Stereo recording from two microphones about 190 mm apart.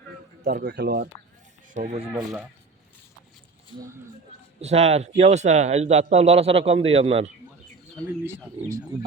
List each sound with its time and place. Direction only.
0.4 s a man's voice: 55° right (ahead or behind)
1.7 s speech: 40° right (ahead or behind)
4.6 s speech: 35° right (ahead or behind)